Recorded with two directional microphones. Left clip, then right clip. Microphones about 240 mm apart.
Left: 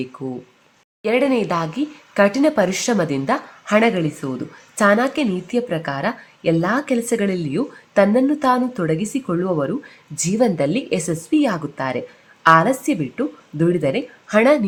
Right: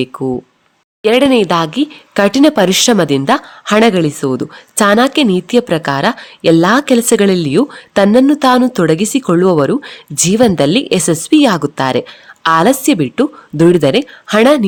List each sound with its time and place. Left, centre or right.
0.0 s a woman's voice: right